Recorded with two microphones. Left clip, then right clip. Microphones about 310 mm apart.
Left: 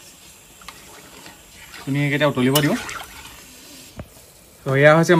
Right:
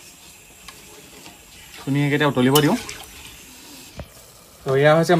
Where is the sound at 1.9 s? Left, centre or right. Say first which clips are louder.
Even; centre.